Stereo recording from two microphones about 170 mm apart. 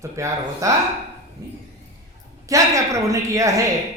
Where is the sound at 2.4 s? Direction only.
20° right (ahead or behind).